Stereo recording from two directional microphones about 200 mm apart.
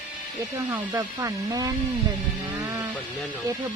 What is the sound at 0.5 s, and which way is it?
Speech, 15° right (ahead or behind).